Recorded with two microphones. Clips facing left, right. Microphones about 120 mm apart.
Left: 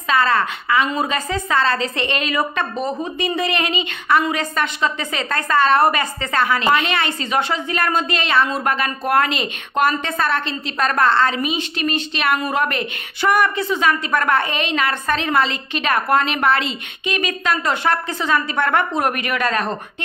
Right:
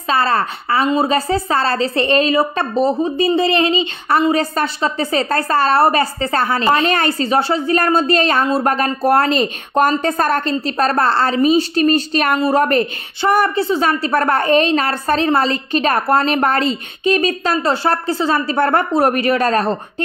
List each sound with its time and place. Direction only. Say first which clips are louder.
0.1 s a woman's voice: right 1 dB; 35° right (ahead or behind)